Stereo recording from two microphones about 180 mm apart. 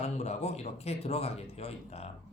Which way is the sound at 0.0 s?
35° left (ahead or behind).